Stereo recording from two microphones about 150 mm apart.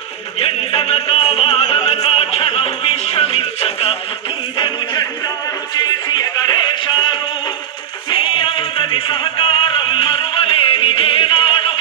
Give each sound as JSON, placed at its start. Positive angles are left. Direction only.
{"t": 0.4, "sound": "music", "side_deg": 40}
{"t": 4.6, "sound": "a sound", "side_deg": 30}
{"t": 6.0, "sound": "music", "side_deg": 30}